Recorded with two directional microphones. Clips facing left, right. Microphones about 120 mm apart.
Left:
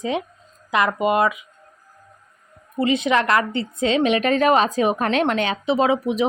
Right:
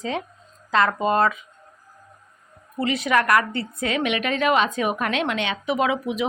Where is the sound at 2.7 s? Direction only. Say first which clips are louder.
Left 3 dB; 20° left (ahead or behind).